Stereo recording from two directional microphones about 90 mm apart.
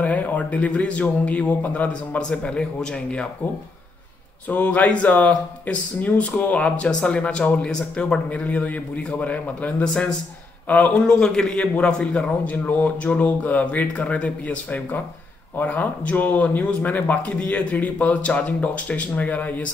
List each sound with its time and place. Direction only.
0.0 s a man's voice: 15° left (ahead or behind)
4.5 s a man's voice: 15° left (ahead or behind)